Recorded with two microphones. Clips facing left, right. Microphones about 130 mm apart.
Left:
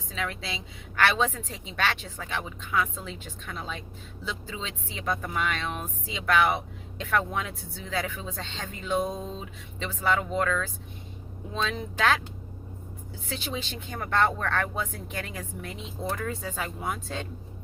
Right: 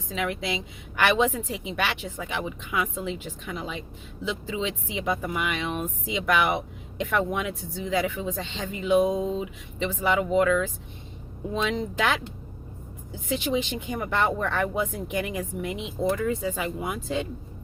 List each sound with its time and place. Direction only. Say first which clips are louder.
0.1 s a woman's voice: right 5 dB; 15° right (ahead or behind)
13.2 s a woman's voice: right 8 dB; 15° right (ahead or behind)